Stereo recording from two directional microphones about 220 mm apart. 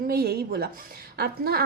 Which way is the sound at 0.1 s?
45° right (ahead or behind).